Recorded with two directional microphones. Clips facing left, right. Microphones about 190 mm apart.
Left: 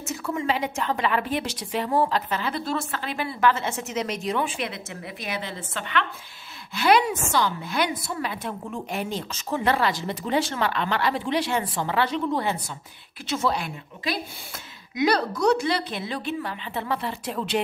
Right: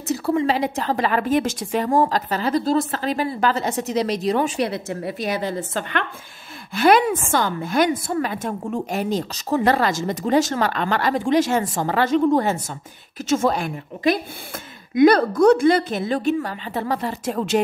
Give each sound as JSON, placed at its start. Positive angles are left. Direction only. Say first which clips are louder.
{"t": 0.1, "sound": "a woman's voice", "louder": "right 7 dB", "side_deg": -35}